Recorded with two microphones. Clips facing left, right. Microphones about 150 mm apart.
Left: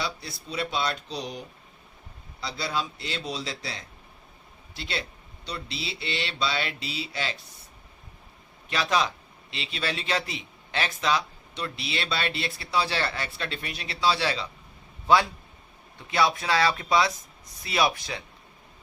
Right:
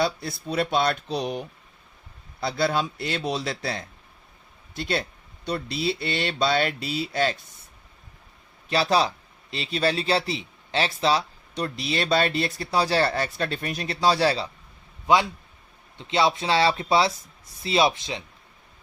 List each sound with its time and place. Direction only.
0.0 s a man's voice: 50° right (ahead or behind)
8.7 s a man's voice: 35° right (ahead or behind)
15.0 s a man's voice: 20° right (ahead or behind)